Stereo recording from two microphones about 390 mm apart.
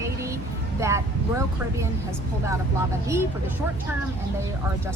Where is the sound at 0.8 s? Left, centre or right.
Centre.